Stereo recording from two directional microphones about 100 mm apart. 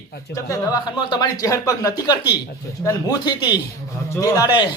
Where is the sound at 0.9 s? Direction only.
45° left (ahead or behind).